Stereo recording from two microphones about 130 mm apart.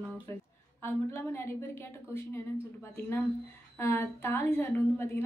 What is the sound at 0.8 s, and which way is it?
A woman's voice, 20° left (ahead or behind).